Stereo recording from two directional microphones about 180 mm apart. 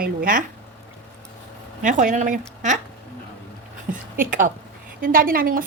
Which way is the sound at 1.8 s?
45° right (ahead or behind).